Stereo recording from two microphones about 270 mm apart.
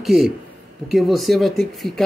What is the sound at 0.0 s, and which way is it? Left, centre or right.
A man's voice, centre.